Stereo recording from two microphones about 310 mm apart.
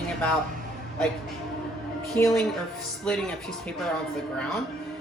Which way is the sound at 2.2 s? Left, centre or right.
Centre.